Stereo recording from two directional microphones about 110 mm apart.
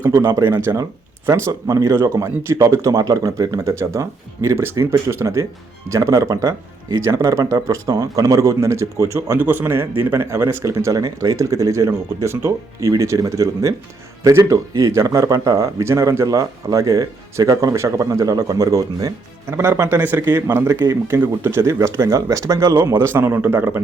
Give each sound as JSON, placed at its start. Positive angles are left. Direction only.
{"t": 0.0, "sound": "speech", "side_deg": -25}